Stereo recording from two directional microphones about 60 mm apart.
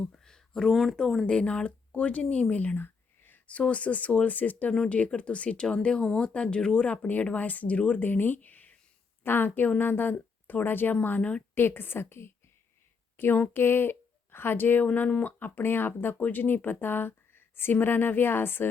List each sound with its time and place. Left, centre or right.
0.3 s a sound: centre
0.9 s speech: centre
1.3 s speech: centre; by 3.5 s left
3.5 s speech: left
11.2 s speech: centre
11.5 s speech: left